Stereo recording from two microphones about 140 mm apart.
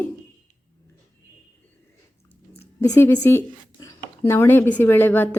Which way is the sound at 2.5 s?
20° left (ahead or behind).